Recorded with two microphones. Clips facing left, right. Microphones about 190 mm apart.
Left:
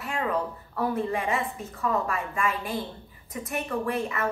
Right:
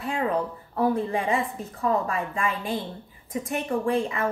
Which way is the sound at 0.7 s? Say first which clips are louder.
Right 3 dB; 30° right (ahead or behind).